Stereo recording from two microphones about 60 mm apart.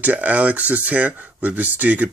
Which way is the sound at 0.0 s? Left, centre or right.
Right.